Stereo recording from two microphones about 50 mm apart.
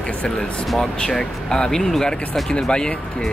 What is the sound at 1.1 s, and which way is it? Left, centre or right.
Speech, centre.